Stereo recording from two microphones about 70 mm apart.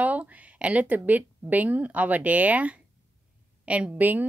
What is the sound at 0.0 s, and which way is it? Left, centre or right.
A woman's voice, right.